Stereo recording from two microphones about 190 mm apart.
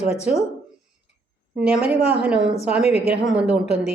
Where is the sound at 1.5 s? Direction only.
5° right (ahead or behind).